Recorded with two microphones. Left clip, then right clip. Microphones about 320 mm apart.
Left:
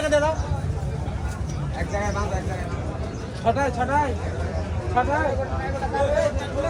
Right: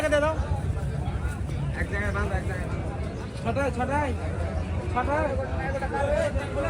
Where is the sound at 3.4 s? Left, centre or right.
Left.